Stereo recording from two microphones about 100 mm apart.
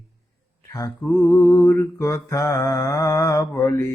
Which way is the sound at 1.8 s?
30° left (ahead or behind).